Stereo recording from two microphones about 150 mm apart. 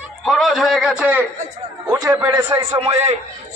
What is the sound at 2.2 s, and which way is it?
Speech, 20° right (ahead or behind).